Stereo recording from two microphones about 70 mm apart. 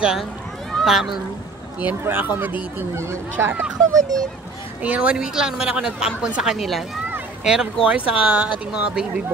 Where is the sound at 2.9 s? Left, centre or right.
Right.